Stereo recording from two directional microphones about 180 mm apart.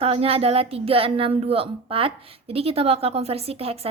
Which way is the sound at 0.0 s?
35° right (ahead or behind).